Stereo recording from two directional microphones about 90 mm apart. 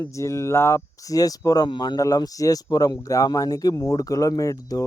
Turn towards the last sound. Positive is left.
turn(degrees=40)  # may be behind; listen again after turning